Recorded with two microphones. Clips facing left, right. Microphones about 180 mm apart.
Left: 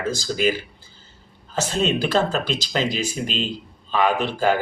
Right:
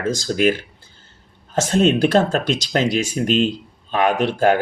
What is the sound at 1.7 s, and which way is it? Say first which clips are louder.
Speech: right 6 dB; 50° right (ahead or behind).